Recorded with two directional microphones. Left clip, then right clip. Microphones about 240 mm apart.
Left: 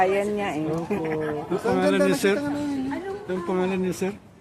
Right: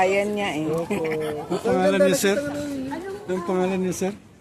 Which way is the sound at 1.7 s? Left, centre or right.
Right.